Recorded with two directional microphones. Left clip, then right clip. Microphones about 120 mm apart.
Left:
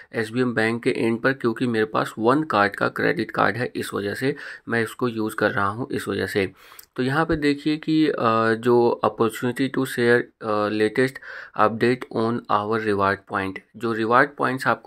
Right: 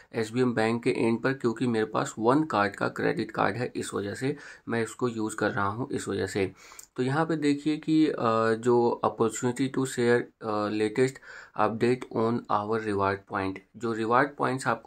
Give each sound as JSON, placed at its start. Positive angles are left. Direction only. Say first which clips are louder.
{"t": 0.1, "sound": "speech", "louder": "left 4 dB", "side_deg": 15}